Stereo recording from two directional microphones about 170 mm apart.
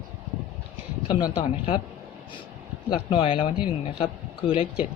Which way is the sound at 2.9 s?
30° left (ahead or behind).